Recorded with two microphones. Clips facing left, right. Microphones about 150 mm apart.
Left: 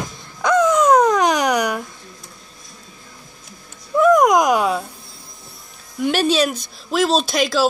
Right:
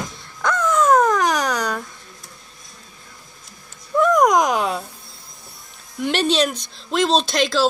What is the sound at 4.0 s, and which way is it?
Speech, 5° left (ahead or behind).